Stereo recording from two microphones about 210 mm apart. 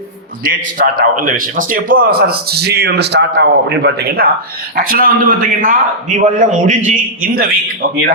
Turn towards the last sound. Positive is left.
turn(degrees=-45)  # may be behind; listen again after turning